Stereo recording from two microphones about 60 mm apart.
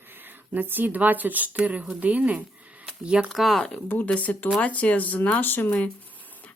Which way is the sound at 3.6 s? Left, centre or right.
Centre.